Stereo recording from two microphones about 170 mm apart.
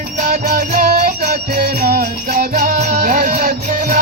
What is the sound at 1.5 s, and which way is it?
Music, 65° right (ahead or behind).